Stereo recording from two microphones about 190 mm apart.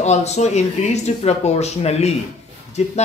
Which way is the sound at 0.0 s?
35° left (ahead or behind).